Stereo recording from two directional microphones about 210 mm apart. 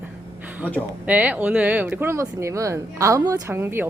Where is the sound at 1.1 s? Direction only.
5° right (ahead or behind).